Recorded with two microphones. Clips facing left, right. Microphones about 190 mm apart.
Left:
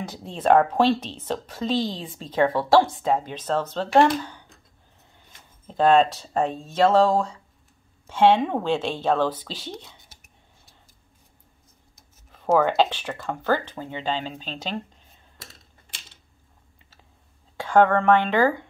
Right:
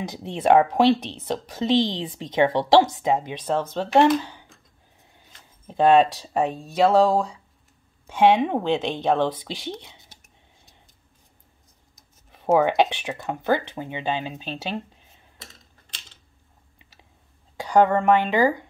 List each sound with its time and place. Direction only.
0.0 s speech: 15° right (ahead or behind)
5.7 s speech: 10° right (ahead or behind)
11.9 s speech: 15° right (ahead or behind)
17.7 s speech: 15° right (ahead or behind)